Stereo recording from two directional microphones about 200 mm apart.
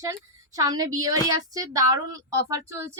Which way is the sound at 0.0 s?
15° right (ahead or behind).